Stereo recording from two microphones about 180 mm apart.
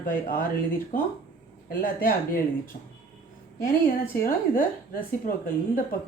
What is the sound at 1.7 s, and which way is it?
Speech, 50° left (ahead or behind).